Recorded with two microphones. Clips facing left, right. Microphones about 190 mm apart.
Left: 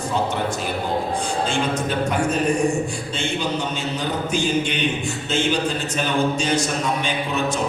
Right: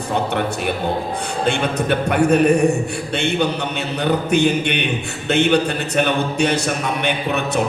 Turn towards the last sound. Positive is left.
turn(degrees=-60)  # may be behind; listen again after turning